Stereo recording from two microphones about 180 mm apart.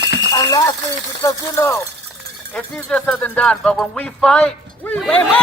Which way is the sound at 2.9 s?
5° left (ahead or behind).